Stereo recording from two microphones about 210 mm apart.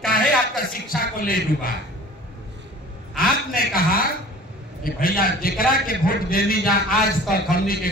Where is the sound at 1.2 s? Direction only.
45° left (ahead or behind).